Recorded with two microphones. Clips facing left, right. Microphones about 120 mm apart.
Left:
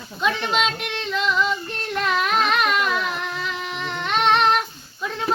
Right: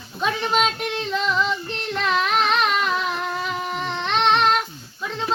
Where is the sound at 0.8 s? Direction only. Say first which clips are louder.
Right 1 dB; 35° right (ahead or behind).